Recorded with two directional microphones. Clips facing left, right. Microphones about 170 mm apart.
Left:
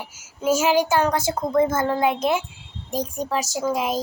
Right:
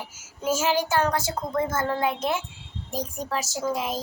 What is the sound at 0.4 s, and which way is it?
Child singing, 15° left (ahead or behind).